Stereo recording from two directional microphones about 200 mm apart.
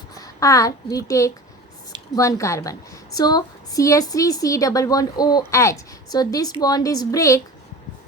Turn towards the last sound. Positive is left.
turn(degrees=15)  # may be behind; listen again after turning